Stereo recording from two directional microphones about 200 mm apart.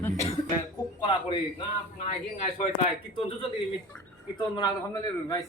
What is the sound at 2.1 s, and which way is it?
Speech, 40° left (ahead or behind).